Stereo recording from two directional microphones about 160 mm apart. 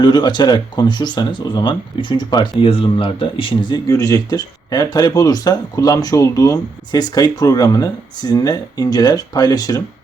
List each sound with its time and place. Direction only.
0.0 s speech: 25° left (ahead or behind)
3.8 s speech: 20° left (ahead or behind)